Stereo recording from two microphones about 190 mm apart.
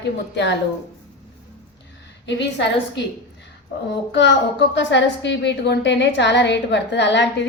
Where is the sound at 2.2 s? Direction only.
70° left (ahead or behind).